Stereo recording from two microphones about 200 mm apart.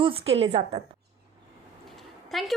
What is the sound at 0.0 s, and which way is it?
Speech, 30° right (ahead or behind).